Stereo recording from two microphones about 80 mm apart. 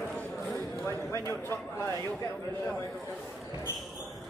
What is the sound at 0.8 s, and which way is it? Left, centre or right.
Speech, left.